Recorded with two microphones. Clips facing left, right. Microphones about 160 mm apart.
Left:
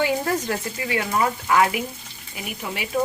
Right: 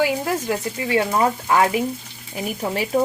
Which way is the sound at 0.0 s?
10° right (ahead or behind).